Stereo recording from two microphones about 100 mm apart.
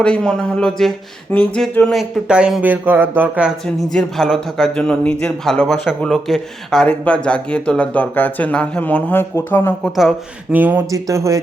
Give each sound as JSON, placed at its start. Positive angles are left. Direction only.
{"t": 0.0, "sound": "speech", "side_deg": 10}
{"t": 1.8, "sound": "speech", "side_deg": 0}
{"t": 3.8, "sound": "speech", "side_deg": 0}
{"t": 9.8, "sound": "speech", "side_deg": 0}
{"t": 10.5, "sound": "speech", "side_deg": -20}
{"t": 10.9, "sound": "speech", "side_deg": -30}